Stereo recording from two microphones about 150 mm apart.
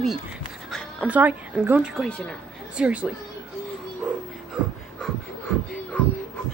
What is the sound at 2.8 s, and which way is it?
Speech, 5° right (ahead or behind).